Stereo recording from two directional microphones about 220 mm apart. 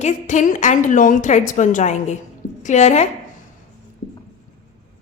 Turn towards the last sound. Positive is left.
turn(degrees=30)  # may be behind; listen again after turning